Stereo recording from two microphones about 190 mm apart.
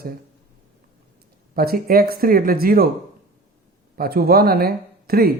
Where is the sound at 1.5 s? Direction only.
50° right (ahead or behind).